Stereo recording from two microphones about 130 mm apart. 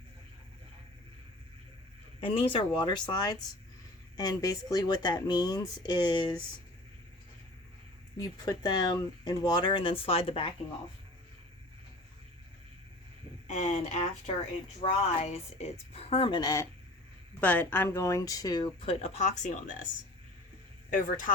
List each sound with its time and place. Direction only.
2.2 s speech: 45° left (ahead or behind)
8.2 s speech: 30° left (ahead or behind)
13.5 s speech: 65° left (ahead or behind); by 16.4 s 45° left (ahead or behind)
16.4 s speech: 30° left (ahead or behind)
17.4 s speech: 15° left (ahead or behind); by 18.7 s 30° left (ahead or behind)
18.8 s speech: 50° left (ahead or behind); by 19.8 s 70° left (ahead or behind)
20.9 s speech: 90° left